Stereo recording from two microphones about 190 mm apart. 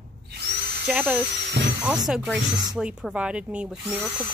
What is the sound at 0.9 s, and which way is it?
Speech, 10° right (ahead or behind).